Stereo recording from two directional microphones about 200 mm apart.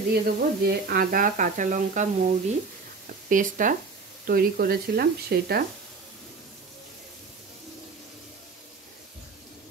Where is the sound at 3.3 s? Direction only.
40° right (ahead or behind).